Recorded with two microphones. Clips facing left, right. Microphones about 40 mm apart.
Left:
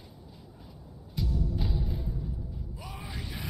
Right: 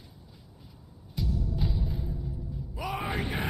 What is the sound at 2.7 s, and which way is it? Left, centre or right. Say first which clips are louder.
Music: right 15 dB; right.